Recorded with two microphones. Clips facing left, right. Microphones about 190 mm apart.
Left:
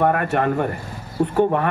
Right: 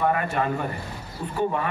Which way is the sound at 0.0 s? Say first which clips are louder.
Left 5 dB; 60° left (ahead or behind).